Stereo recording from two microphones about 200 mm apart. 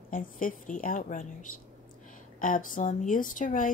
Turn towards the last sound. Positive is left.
turn(degrees=40)  # may be behind; listen again after turning